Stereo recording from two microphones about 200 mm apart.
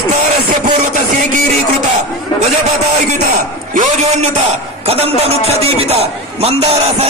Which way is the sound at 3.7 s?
40° right (ahead or behind).